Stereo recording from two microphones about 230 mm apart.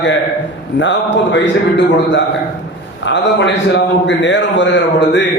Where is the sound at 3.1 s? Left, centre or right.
Left.